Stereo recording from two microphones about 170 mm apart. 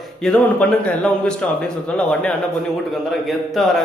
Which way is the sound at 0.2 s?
5° left (ahead or behind).